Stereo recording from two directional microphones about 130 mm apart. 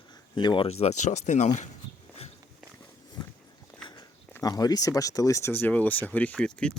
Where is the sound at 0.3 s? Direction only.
40° left (ahead or behind); by 1.5 s 65° left (ahead or behind).